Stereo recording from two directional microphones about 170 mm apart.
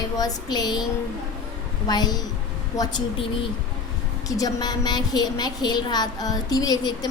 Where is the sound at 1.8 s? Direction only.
25° left (ahead or behind).